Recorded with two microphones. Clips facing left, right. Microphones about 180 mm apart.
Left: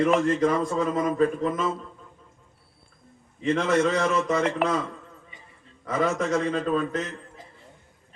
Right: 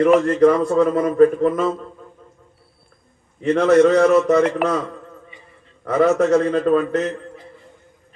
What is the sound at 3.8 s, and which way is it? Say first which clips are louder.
Speech: right 10 dB; 55° right (ahead or behind).